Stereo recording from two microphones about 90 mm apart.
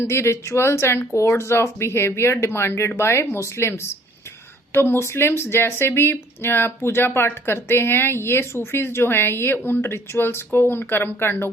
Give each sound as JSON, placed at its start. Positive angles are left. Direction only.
{"t": 0.0, "sound": "speech", "side_deg": 30}